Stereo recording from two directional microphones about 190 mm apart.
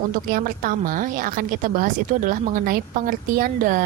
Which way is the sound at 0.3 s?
50° right (ahead or behind).